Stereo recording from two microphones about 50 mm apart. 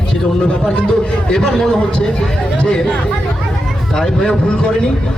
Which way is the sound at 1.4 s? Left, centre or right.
Centre.